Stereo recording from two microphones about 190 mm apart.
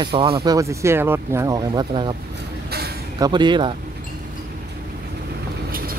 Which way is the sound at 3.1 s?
20° right (ahead or behind).